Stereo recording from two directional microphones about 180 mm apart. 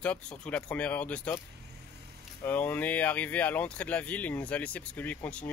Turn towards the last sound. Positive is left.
turn(degrees=10)  # may be behind; listen again after turning